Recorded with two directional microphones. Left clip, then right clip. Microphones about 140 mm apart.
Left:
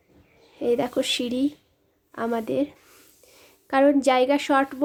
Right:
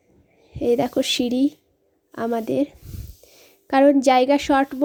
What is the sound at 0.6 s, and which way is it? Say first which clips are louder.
A woman's voice: right 3 dB; 30° right (ahead or behind).